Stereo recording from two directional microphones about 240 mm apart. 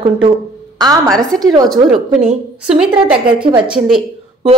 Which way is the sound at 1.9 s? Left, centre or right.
Centre.